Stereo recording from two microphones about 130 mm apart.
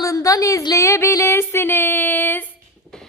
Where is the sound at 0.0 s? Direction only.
25° left (ahead or behind).